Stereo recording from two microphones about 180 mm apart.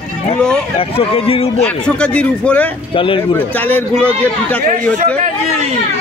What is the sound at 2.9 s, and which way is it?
Speech, 30° left (ahead or behind).